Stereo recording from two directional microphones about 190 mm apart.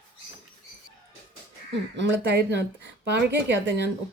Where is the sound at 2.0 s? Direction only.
65° right (ahead or behind).